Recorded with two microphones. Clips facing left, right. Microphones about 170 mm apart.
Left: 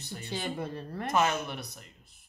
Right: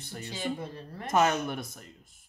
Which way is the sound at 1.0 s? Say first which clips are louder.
Right 3 dB; 45° right (ahead or behind).